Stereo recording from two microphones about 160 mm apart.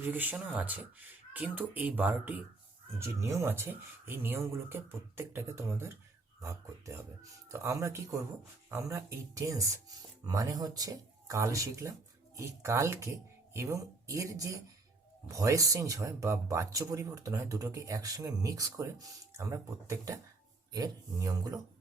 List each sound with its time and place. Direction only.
0.0 s speech: 10° right (ahead or behind)